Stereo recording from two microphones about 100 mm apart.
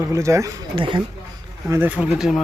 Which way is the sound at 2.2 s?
Centre (ahead or behind).